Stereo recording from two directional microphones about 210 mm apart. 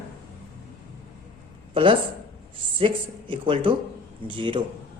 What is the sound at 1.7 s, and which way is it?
Speech, 25° right (ahead or behind).